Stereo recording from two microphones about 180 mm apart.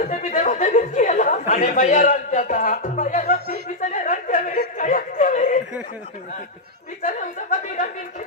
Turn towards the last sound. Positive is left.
turn(degrees=45)  # may be behind; listen again after turning